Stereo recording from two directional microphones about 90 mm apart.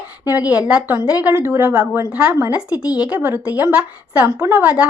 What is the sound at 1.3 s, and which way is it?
A woman's voice, 30° right (ahead or behind).